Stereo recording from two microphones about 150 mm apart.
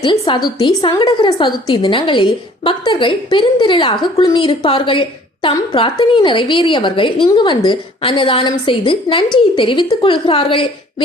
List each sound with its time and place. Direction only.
0.0 s a woman's voice: 30° left (ahead or behind)